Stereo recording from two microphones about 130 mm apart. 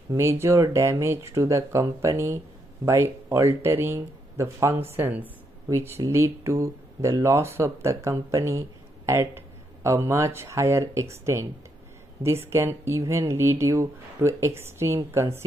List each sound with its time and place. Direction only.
0.1 s a woman's voice: 20° right (ahead or behind)
12.4 s speech: 20° right (ahead or behind)